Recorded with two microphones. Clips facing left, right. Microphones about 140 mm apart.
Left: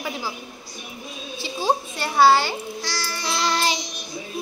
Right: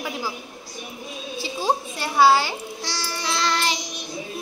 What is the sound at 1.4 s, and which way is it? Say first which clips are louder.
A child's voice: left 1 dB; centre (ahead or behind).